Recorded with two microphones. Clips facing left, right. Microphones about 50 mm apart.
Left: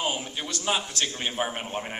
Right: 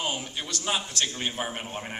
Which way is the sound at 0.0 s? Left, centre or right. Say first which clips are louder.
Left 2 dB; centre.